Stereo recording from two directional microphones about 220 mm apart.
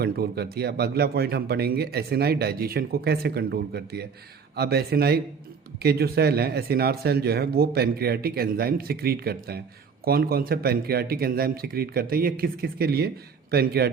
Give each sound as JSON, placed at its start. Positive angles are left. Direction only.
{"t": 0.0, "sound": "speech", "side_deg": -45}